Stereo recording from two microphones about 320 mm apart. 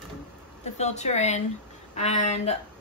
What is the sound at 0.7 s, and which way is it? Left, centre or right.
A woman's voice, left.